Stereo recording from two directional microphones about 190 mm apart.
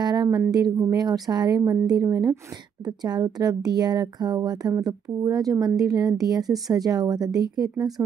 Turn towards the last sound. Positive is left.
turn(degrees=-20)  # may be behind; listen again after turning